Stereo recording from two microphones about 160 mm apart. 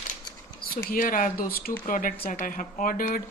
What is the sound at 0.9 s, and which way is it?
Speech, 55° left (ahead or behind).